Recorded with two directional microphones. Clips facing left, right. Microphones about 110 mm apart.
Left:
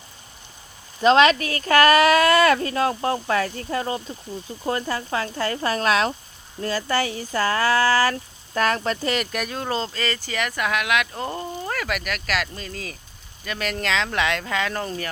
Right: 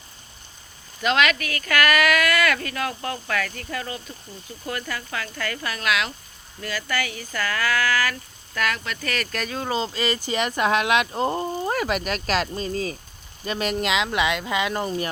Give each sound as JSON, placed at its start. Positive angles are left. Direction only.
{"t": 1.0, "sound": "speech", "side_deg": 30}
{"t": 9.9, "sound": "speech", "side_deg": -15}
{"t": 13.7, "sound": "speech", "side_deg": -10}